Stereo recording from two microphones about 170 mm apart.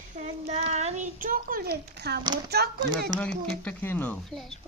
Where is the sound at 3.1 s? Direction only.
25° right (ahead or behind).